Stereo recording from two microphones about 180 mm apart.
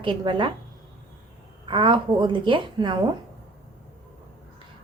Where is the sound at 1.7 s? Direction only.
30° right (ahead or behind).